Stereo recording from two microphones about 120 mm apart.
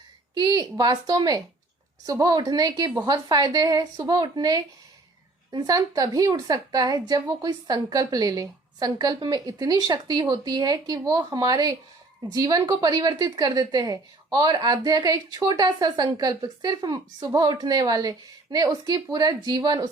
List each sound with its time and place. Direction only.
0.3 s a woman's voice: 35° right (ahead or behind)